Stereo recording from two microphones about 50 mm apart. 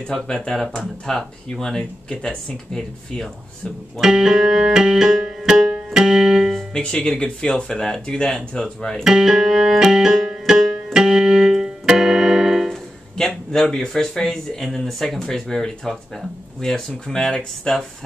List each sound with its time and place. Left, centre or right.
0.1 s speech: centre
4.0 s music: centre
5.9 s keyboard: centre
6.7 s speech: left
9.0 s keyboard: centre
13.2 s speech: centre